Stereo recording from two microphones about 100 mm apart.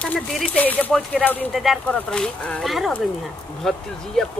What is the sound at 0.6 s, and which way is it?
Speech, 15° left (ahead or behind).